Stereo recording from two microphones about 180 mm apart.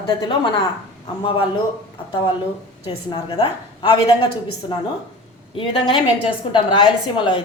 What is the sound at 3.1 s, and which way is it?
Speech, 30° left (ahead or behind).